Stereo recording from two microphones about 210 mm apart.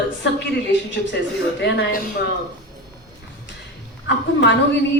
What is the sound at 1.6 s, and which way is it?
Speech, 55° left (ahead or behind).